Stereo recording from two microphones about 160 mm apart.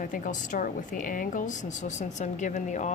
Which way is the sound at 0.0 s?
55° left (ahead or behind).